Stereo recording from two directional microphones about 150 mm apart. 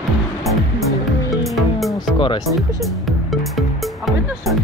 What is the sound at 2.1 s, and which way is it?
Speech, 35° left (ahead or behind).